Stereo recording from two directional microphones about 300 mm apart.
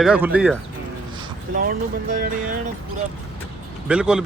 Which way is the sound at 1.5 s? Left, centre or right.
Right.